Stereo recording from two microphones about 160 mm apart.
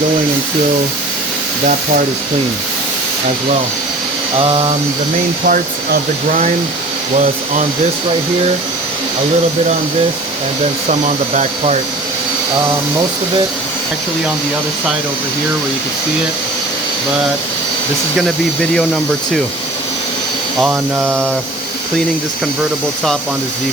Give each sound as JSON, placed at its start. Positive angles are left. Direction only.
{"t": 4.4, "sound": "speech", "side_deg": -35}
{"t": 5.5, "sound": "speech", "side_deg": -60}
{"t": 10.8, "sound": "speech", "side_deg": -50}